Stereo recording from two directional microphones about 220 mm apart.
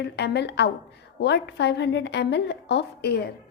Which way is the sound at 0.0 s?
50° left (ahead or behind).